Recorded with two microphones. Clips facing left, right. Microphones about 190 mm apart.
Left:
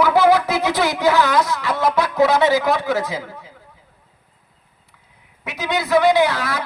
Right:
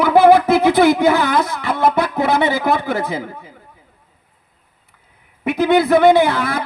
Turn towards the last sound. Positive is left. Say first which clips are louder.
# right 3 dB
turn(degrees=-55)  # may be behind; listen again after turning